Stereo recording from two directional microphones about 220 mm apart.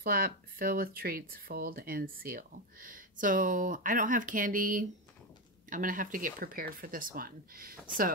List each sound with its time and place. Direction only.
0.0 s speech: 40° right (ahead or behind)